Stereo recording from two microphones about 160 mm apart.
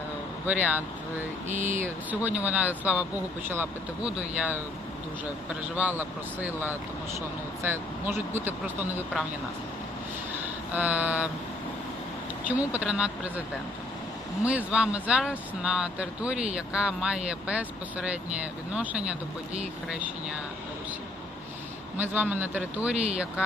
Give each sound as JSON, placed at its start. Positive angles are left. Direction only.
{"t": 0.4, "sound": "speech", "side_deg": -10}
{"t": 1.5, "sound": "speech", "side_deg": -50}
{"t": 2.0, "sound": "speech", "side_deg": -10}
{"t": 5.7, "sound": "speech", "side_deg": -10}
{"t": 10.8, "sound": "speech", "side_deg": -10}
{"t": 12.5, "sound": "speech", "side_deg": -10}
{"t": 14.4, "sound": "speech", "side_deg": -10}
{"t": 21.9, "sound": "speech", "side_deg": -10}